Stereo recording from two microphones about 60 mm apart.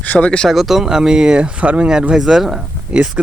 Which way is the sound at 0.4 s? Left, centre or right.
Centre.